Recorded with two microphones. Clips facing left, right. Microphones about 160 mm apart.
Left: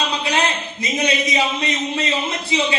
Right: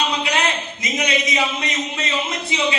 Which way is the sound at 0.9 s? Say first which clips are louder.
Left 2 dB; 30° left (ahead or behind).